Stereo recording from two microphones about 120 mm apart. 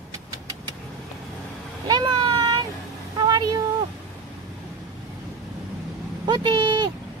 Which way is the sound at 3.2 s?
35° right (ahead or behind).